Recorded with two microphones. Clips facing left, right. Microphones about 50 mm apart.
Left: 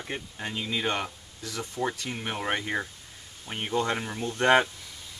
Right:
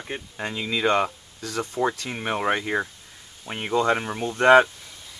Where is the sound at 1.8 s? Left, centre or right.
Right.